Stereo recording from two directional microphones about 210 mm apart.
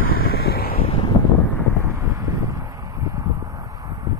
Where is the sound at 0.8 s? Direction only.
25° left (ahead or behind).